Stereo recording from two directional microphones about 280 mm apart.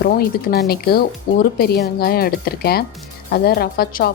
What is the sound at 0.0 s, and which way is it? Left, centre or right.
Speech, left.